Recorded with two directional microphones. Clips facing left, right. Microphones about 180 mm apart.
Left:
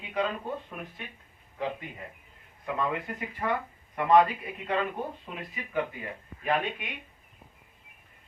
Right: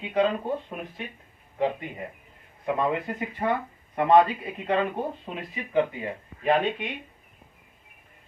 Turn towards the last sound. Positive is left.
turn(degrees=-30)  # may be behind; listen again after turning